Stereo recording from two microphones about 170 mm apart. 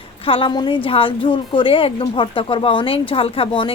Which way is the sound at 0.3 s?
30° left (ahead or behind).